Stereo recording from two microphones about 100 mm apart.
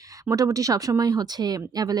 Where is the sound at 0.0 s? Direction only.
35° right (ahead or behind).